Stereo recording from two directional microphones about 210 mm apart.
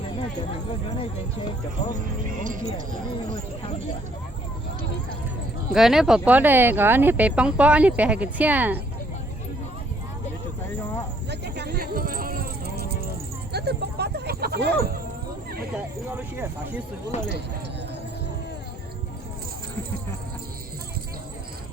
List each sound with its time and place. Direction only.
0.9 s speech: 20° left (ahead or behind)
2.4 s speech: 40° right (ahead or behind)
5.7 s speech: centre (ahead or behind)
11.3 s a sound: 50° right (ahead or behind)
13.5 s speech: 50° right (ahead or behind)
15.7 s speech: 10° right (ahead or behind)
17.1 s speech: 30° left (ahead or behind)